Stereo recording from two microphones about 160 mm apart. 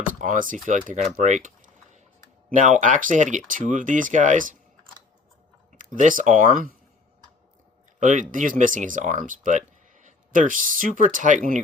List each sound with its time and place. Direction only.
0.2 s speech: 55° right (ahead or behind)
5.7 s speech: 55° right (ahead or behind)
7.9 s speech: 50° right (ahead or behind)